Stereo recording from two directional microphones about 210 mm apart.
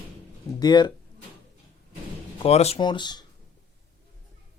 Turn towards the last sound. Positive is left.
turn(degrees=20)  # may be behind; listen again after turning